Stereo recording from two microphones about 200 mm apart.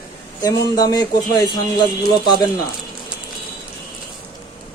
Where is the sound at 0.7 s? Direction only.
20° left (ahead or behind).